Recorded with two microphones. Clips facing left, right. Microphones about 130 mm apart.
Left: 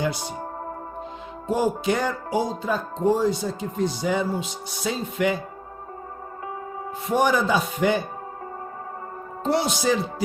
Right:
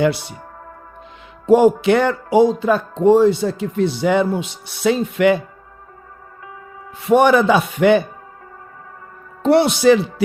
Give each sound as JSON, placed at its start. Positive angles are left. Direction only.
{"t": 0.0, "sound": "speech", "side_deg": -70}
{"t": 1.5, "sound": "speech", "side_deg": -70}
{"t": 7.0, "sound": "speech", "side_deg": -70}
{"t": 9.4, "sound": "speech", "side_deg": -65}